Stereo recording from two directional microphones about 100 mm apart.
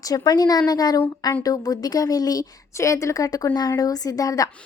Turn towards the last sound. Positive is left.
turn(degrees=35)  # may be behind; listen again after turning